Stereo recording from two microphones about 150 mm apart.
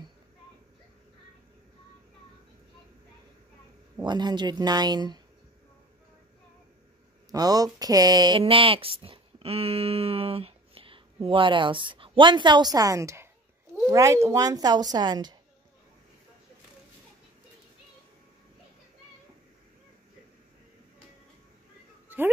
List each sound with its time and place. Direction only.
4.0 s speech: 30° right (ahead or behind)
7.2 s speech: 25° right (ahead or behind)